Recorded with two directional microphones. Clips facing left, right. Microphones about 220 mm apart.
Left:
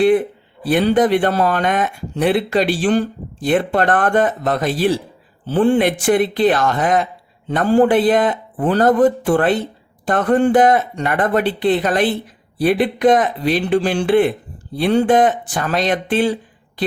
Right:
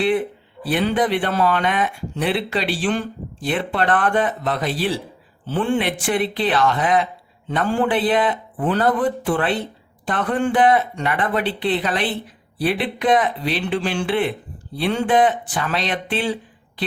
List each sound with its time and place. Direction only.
0.6 s speech: 45° left (ahead or behind)